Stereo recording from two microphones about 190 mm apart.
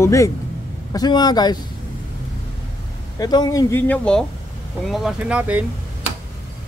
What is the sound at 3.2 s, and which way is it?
Speech, 20° left (ahead or behind).